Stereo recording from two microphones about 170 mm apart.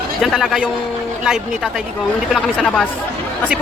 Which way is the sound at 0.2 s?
Centre (ahead or behind).